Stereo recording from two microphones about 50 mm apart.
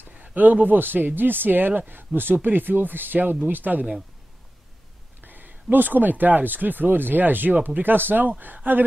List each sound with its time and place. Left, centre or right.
0.2 s speech: right
5.2 s speech: right